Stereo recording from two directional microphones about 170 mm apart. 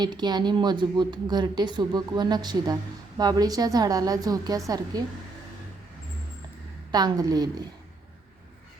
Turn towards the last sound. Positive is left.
turn(degrees=-25)  # may be behind; listen again after turning